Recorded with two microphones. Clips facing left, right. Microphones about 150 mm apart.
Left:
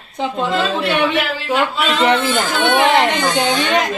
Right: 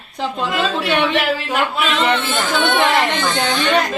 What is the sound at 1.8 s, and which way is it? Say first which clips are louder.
Speech: left 2 dB; 35° left (ahead or behind).